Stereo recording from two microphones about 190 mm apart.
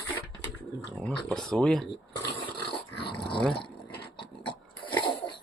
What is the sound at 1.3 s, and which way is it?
Speech, 5° left (ahead or behind).